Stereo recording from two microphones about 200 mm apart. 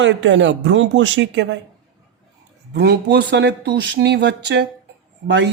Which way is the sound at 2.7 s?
55° right (ahead or behind).